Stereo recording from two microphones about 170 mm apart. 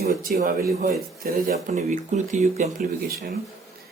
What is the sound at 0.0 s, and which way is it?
Speech, 55° right (ahead or behind).